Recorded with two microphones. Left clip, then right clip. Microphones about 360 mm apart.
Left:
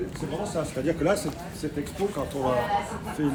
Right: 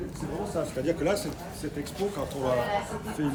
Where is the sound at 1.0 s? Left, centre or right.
Centre.